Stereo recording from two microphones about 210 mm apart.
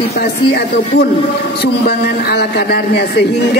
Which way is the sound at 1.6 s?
50° left (ahead or behind).